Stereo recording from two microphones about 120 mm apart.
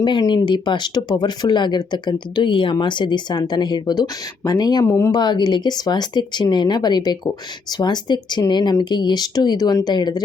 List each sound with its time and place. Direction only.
0.0 s speech: 40° left (ahead or behind)
5.2 s speech: 35° left (ahead or behind)